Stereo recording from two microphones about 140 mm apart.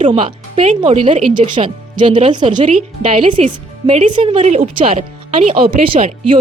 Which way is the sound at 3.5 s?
55° right (ahead or behind).